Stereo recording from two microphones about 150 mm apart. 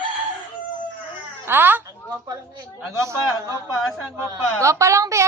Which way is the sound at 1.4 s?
15° right (ahead or behind).